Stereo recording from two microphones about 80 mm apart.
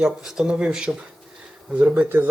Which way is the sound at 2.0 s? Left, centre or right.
Right.